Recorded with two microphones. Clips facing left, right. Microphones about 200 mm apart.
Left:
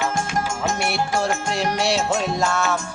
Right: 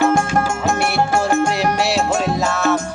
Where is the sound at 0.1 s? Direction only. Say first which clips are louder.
Right 7 dB; 55° right (ahead or behind).